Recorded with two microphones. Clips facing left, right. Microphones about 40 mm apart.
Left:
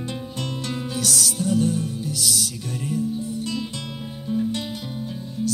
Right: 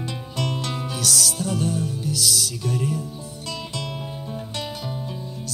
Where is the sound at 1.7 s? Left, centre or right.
Left.